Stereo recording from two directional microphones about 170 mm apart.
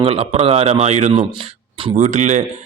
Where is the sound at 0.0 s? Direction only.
35° right (ahead or behind).